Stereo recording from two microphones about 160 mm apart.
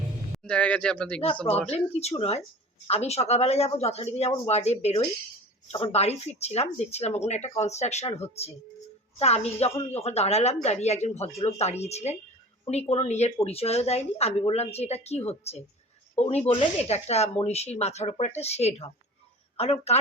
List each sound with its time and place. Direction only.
0.3 s speech: 5° left (ahead or behind)
1.9 s a woman's voice: 40° left (ahead or behind)